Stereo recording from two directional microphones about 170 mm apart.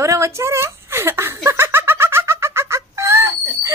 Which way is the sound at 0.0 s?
15° right (ahead or behind).